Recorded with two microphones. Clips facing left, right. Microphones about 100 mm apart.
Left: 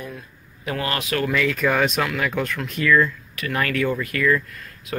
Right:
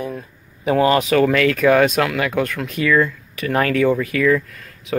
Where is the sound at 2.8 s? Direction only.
90° right.